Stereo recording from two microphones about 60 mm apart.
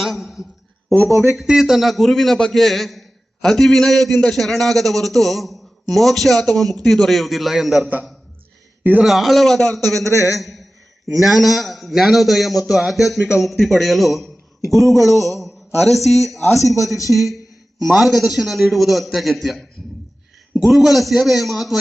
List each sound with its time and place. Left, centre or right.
0.0 s speech: centre
1.5 s a man's voice: centre
8.8 s a man's voice: right
9.0 s a man's voice: centre
10.1 s a man's voice: left
10.4 s a man's voice: centre